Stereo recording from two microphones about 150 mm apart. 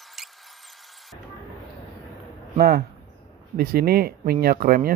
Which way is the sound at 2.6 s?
90° right.